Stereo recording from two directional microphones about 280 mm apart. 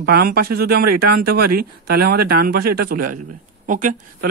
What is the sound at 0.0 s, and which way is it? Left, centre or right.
Speech, right.